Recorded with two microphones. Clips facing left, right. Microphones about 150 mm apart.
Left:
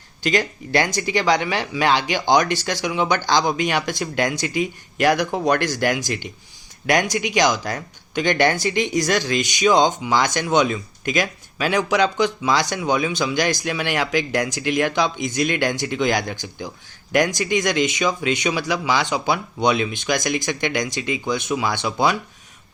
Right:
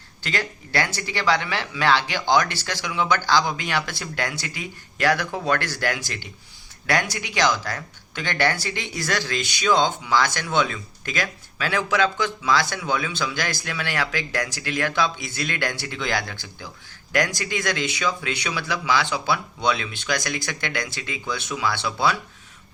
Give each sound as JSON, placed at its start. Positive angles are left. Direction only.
{"t": 0.2, "sound": "speech", "side_deg": 15}